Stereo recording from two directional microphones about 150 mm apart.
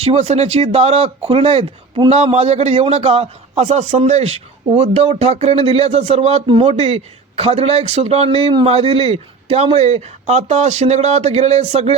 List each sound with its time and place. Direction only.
0.0 s a man's voice: 45° right (ahead or behind)